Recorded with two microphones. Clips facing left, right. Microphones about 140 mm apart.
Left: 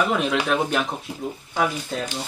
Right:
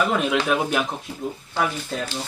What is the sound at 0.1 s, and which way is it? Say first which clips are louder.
Speech: right 1 dB; centre (ahead or behind).